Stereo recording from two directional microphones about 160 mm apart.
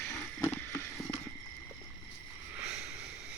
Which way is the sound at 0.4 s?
15° left (ahead or behind).